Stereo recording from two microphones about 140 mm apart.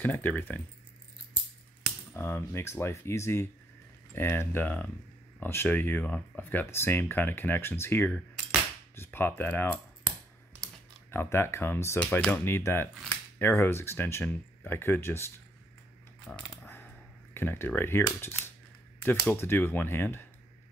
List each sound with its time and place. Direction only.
0.0 s speech: 10° left (ahead or behind)
2.1 s speech: 15° left (ahead or behind)
10.1 s computer keyboard: centre (ahead or behind)
11.1 s speech: 20° left (ahead or behind)
16.3 s a sound: 10° left (ahead or behind)
17.3 s speech: 15° left (ahead or behind)